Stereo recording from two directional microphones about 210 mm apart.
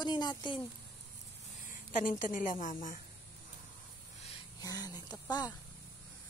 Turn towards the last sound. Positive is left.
turn(degrees=20)  # may be behind; listen again after turning